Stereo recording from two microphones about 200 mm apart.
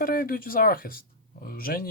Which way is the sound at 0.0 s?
45° left (ahead or behind).